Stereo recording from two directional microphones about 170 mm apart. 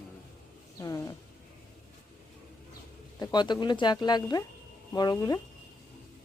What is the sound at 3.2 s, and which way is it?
Speech, 25° left (ahead or behind).